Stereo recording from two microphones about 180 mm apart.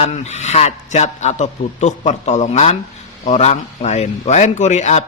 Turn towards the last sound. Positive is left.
turn(degrees=40)  # may be behind; listen again after turning